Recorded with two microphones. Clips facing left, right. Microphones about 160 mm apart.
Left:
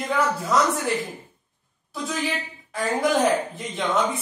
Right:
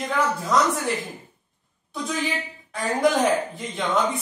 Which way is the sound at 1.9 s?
Centre (ahead or behind).